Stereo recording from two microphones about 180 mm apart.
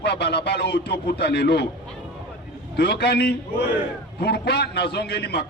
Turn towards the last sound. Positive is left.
turn(degrees=65)  # may be behind; listen again after turning